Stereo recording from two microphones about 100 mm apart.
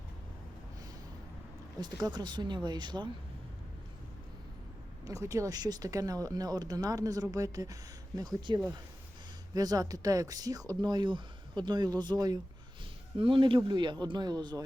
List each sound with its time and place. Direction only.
1.8 s speech: 45° right (ahead or behind)
5.0 s speech: 30° right (ahead or behind)
13.1 s speech: 55° right (ahead or behind); by 14.6 s 40° right (ahead or behind)